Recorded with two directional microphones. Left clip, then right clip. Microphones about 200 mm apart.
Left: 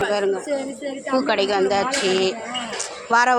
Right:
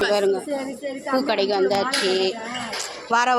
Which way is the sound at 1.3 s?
Centre (ahead or behind).